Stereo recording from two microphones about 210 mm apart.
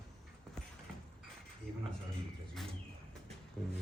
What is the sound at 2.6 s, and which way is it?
Bird, centre (ahead or behind).